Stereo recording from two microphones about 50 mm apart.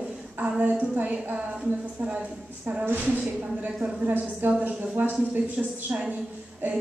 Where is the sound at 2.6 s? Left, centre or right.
Right.